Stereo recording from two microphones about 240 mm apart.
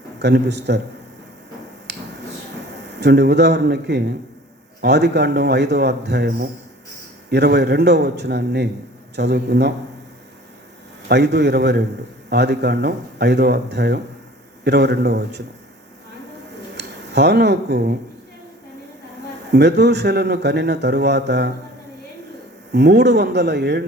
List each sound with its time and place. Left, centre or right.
0.2 s a man's voice: right
2.8 s a man's voice: right
11.1 s a man's voice: right
17.1 s a man's voice: right
19.5 s a man's voice: right
22.7 s a man's voice: right